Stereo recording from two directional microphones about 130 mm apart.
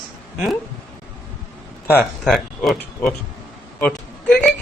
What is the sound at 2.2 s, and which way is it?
Speech, centre (ahead or behind).